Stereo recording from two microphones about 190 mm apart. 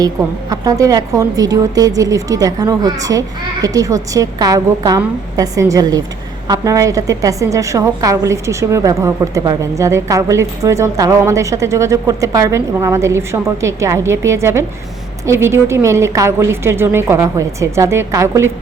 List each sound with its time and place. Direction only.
0.2 s a woman's voice: 20° right (ahead or behind)